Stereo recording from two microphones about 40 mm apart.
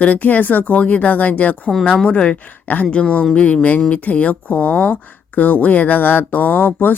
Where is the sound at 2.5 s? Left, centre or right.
Left.